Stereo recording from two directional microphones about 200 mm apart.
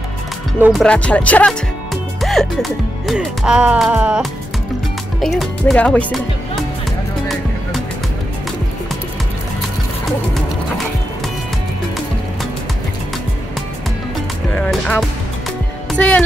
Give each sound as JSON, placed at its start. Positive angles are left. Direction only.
{"t": 0.6, "sound": "music", "side_deg": -5}
{"t": 0.8, "sound": "music", "side_deg": 5}
{"t": 5.2, "sound": "speech", "side_deg": 0}
{"t": 14.5, "sound": "music", "side_deg": 5}
{"t": 15.9, "sound": "speech", "side_deg": 5}